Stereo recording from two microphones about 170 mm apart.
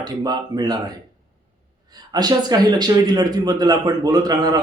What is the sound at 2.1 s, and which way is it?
A man's voice, 25° right (ahead or behind).